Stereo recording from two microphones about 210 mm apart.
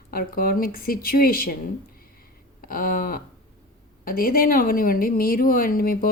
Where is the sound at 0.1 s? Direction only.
45° left (ahead or behind).